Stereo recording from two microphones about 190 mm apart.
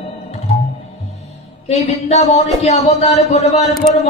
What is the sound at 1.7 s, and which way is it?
Speech, 35° left (ahead or behind).